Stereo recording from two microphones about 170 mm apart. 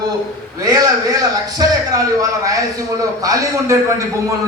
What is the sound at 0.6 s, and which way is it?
A man's voice, 20° right (ahead or behind).